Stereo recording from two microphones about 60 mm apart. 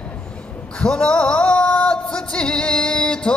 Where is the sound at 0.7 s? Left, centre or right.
Centre.